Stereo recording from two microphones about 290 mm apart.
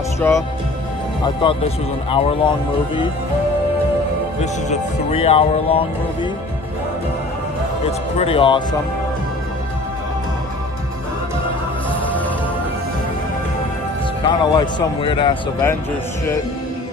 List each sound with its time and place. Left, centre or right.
0.3 s a man's voice: centre
4.4 s speech: left
8.2 s a man's voice: centre
14.2 s a man's voice: centre